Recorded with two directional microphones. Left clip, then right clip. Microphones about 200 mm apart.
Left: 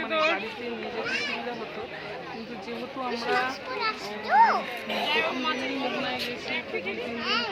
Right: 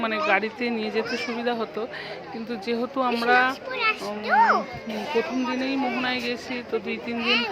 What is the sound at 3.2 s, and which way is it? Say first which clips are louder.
Speech: right 7 dB; 35° right (ahead or behind).